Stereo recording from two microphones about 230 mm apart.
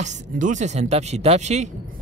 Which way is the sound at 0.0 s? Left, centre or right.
Right.